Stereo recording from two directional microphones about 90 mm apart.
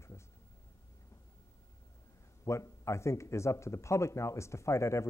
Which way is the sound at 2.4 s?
30° left (ahead or behind).